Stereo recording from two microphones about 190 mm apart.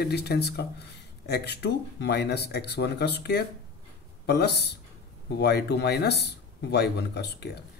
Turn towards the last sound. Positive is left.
turn(degrees=60)  # may be behind; listen again after turning